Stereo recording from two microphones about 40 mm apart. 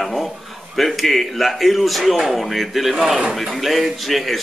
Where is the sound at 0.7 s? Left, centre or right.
Centre.